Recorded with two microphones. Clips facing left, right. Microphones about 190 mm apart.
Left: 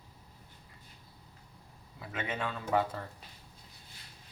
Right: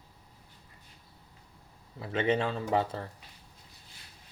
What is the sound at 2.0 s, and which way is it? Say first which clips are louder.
Speech: right 9 dB; 30° right (ahead or behind).